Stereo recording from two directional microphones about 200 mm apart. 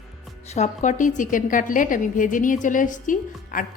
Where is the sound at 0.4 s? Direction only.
35° left (ahead or behind).